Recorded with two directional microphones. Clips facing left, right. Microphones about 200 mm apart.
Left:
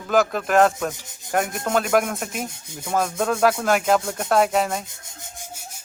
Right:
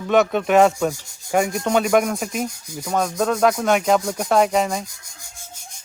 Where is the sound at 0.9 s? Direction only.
20° left (ahead or behind).